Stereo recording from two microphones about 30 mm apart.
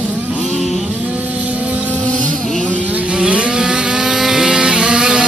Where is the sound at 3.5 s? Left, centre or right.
Right.